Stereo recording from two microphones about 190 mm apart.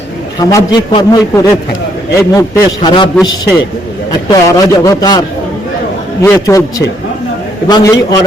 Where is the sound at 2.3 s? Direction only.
20° left (ahead or behind).